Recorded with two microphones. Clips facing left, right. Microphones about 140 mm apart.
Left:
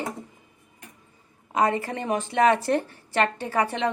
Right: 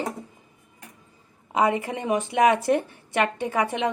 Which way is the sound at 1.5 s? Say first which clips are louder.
Right 1 dB; 15° right (ahead or behind).